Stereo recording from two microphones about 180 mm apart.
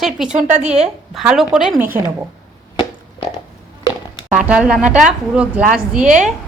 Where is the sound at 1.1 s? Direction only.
Centre (ahead or behind).